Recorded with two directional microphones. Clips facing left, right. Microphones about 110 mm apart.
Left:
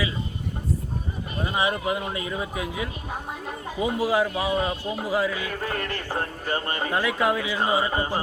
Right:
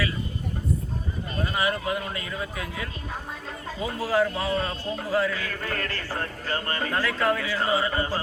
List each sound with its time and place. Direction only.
1.4 s speech: 20° left (ahead or behind)